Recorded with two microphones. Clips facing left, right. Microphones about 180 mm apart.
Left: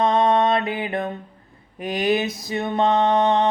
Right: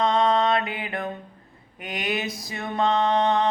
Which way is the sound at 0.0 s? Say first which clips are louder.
Left 3 dB; 25° left (ahead or behind).